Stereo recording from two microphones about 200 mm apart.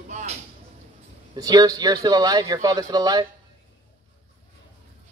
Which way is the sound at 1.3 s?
20° right (ahead or behind).